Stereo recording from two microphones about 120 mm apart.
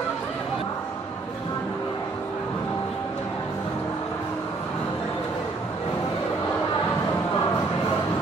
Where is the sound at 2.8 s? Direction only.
20° left (ahead or behind).